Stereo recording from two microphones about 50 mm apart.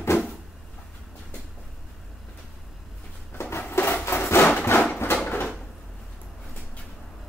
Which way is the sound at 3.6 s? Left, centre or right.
Left.